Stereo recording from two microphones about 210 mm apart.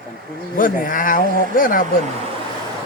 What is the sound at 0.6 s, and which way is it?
A man's voice, 40° left (ahead or behind).